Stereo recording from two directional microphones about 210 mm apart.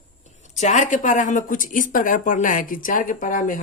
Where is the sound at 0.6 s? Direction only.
35° left (ahead or behind).